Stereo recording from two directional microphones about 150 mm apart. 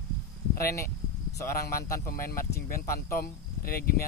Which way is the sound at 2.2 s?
75° left (ahead or behind).